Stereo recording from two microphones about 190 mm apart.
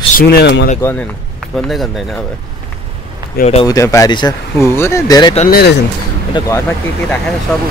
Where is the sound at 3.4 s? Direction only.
35° left (ahead or behind).